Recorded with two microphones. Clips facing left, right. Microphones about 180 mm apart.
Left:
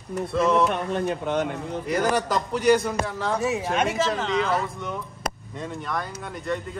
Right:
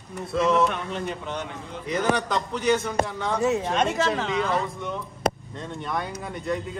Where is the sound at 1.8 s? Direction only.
5° left (ahead or behind).